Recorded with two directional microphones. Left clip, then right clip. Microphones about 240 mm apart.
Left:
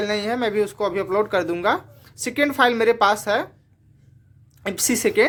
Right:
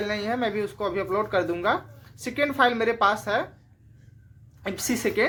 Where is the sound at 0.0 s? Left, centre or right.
Left.